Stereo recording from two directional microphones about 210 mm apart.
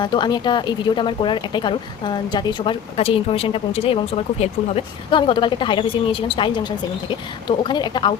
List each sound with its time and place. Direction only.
0.0 s speech: 20° left (ahead or behind)